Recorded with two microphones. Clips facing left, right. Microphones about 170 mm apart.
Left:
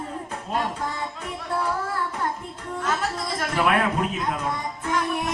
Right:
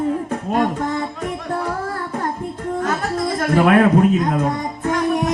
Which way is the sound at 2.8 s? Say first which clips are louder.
Right 5 dB; 45° right (ahead or behind).